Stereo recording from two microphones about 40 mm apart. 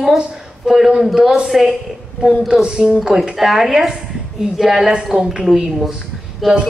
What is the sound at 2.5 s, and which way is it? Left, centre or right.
Speech, right.